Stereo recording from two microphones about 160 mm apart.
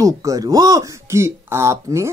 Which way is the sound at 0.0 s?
20° right (ahead or behind).